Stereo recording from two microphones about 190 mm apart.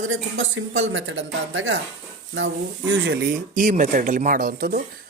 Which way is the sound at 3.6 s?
40° right (ahead or behind).